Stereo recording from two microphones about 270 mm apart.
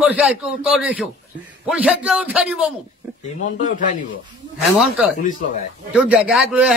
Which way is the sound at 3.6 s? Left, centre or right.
Left.